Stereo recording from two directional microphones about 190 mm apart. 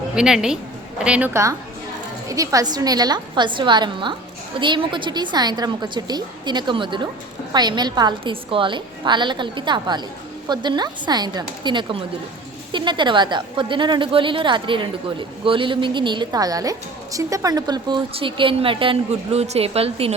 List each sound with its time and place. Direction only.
0.1 s a woman's voice: 5° right (ahead or behind); by 20.1 s 30° right (ahead or behind)